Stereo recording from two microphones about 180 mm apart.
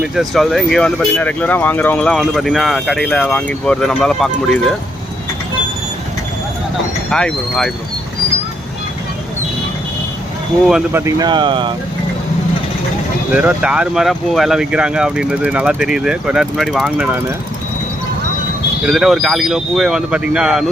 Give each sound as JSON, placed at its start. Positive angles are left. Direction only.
{"t": 0.0, "sound": "speech", "side_deg": 0}
{"t": 7.1, "sound": "speech", "side_deg": 5}
{"t": 10.7, "sound": "speech", "side_deg": -5}
{"t": 11.0, "sound": "speech", "side_deg": -25}
{"t": 13.3, "sound": "speech", "side_deg": -5}
{"t": 18.9, "sound": "speech", "side_deg": 0}